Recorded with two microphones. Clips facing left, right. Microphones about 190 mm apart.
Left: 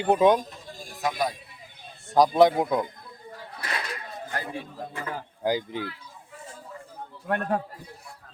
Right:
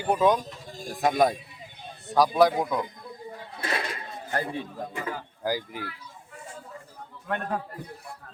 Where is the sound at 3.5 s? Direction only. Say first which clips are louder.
Right 3 dB; 25° right (ahead or behind).